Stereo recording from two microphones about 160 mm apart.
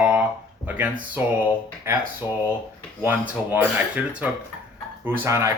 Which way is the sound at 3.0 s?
10° right (ahead or behind).